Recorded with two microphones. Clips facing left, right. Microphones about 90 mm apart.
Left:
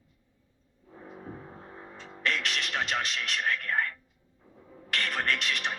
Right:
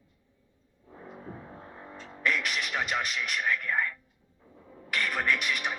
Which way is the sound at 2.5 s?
75° left (ahead or behind).